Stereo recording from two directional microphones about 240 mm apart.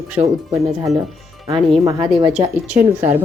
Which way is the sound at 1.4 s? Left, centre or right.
Centre.